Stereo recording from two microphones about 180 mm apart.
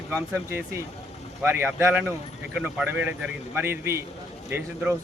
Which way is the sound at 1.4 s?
10° right (ahead or behind).